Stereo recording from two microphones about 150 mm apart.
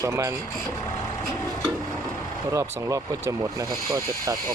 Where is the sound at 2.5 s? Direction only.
20° right (ahead or behind).